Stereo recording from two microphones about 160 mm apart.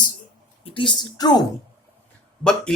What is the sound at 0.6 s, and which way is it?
Speech, 30° left (ahead or behind).